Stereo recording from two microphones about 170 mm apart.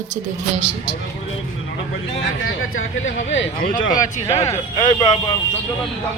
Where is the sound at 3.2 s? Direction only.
90° left.